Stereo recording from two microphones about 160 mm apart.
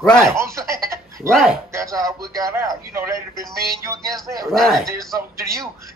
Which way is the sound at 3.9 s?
20° right (ahead or behind).